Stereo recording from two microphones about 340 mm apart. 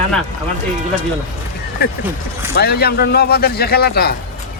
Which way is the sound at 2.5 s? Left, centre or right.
Left.